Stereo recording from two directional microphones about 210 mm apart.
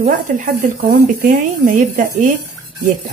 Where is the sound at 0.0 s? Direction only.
40° right (ahead or behind).